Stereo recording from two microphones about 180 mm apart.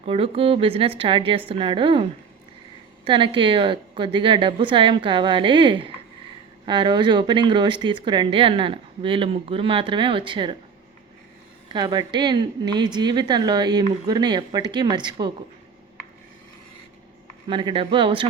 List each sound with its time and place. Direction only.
0.0 s a woman's voice: 30° right (ahead or behind)
11.7 s speech: 25° right (ahead or behind)
17.5 s speech: 25° right (ahead or behind)